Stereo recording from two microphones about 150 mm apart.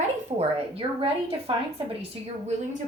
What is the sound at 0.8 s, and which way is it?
Speech, 30° right (ahead or behind).